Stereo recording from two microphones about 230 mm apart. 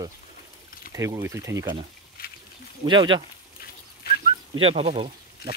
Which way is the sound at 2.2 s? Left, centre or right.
Left.